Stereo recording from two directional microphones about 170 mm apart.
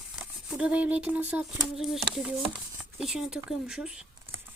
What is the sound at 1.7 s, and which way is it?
Speech, centre (ahead or behind).